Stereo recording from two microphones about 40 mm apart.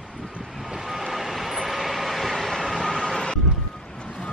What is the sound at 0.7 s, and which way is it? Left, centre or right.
Vehicle, centre.